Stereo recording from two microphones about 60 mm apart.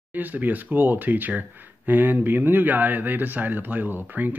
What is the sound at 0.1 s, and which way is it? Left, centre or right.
Speech, right.